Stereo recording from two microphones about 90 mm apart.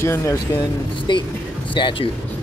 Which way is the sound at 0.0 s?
30° left (ahead or behind).